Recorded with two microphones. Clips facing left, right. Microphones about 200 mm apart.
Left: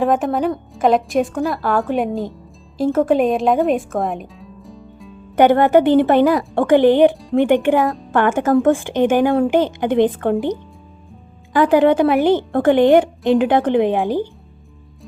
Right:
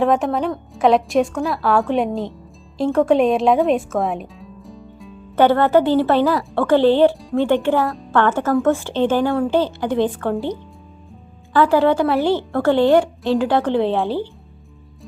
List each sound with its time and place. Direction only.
0.0 s a woman's voice: centre (ahead or behind)
5.4 s a woman's voice: 15° left (ahead or behind)
11.5 s a woman's voice: 15° left (ahead or behind)